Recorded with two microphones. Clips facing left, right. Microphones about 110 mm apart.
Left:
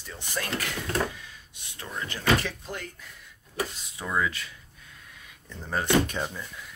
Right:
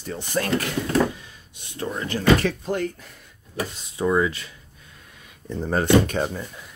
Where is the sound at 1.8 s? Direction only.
35° right (ahead or behind).